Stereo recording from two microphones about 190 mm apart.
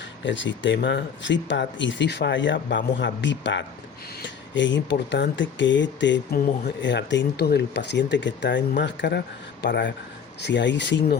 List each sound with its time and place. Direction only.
0.3 s speech: 75° left (ahead or behind)